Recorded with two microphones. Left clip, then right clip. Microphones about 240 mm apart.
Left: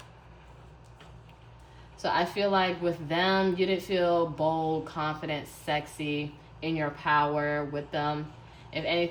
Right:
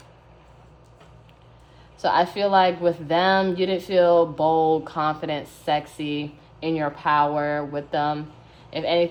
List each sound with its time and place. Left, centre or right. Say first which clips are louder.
2.0 s speech: right 7 dB; centre